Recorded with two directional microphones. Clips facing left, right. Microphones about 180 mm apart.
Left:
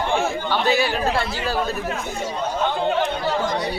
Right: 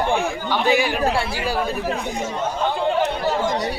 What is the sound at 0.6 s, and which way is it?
Speech, 15° right (ahead or behind).